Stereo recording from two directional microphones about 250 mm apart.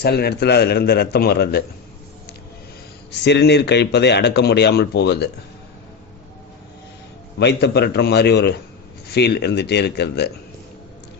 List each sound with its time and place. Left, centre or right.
0.0 s speech: left
3.2 s speech: left
7.3 s speech: left